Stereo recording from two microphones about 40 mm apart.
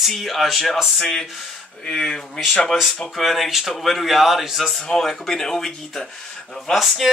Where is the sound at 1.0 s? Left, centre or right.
Centre.